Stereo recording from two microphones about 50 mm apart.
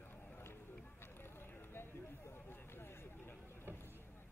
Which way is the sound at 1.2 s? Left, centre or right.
Left.